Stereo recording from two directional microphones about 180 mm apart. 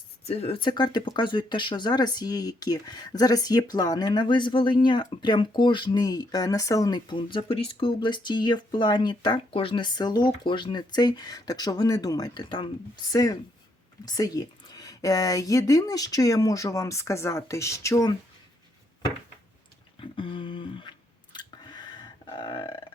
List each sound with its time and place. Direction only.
0.3 s speech: 35° left (ahead or behind)
14.0 s speech: 20° left (ahead or behind)
20.0 s speech: 30° left (ahead or behind)
21.3 s burping: 25° left (ahead or behind)